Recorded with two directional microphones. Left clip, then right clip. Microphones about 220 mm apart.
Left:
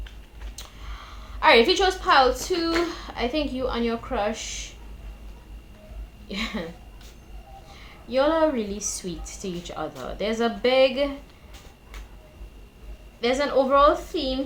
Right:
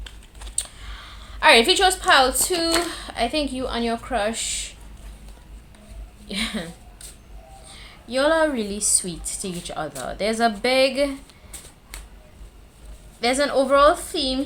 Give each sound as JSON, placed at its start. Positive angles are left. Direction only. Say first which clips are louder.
{"t": 0.5, "sound": "a woman's voice", "louder": "right 7 dB", "side_deg": -35}
{"t": 6.2, "sound": "speech", "louder": "right 3 dB", "side_deg": -30}
{"t": 7.7, "sound": "a woman's voice", "louder": "even", "side_deg": -30}
{"t": 13.1, "sound": "a woman's voice", "louder": "right 2 dB", "side_deg": -30}